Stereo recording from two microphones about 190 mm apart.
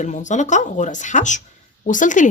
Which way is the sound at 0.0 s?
40° left (ahead or behind).